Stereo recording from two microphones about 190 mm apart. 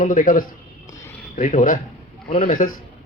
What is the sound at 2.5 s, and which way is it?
Speech, 45° left (ahead or behind).